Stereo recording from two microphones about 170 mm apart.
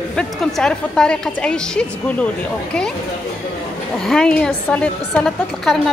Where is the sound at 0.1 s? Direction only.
Centre (ahead or behind).